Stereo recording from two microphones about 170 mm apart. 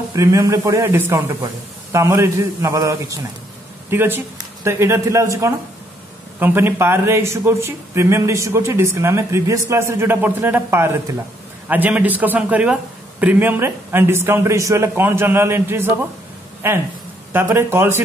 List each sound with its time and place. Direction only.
0.1 s speech: 20° right (ahead or behind)